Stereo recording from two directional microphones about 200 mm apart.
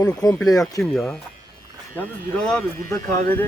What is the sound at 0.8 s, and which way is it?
Speech, 5° left (ahead or behind).